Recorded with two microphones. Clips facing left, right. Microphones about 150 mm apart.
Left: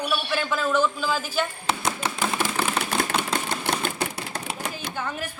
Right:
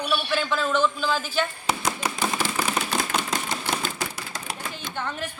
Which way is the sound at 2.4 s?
10° right (ahead or behind).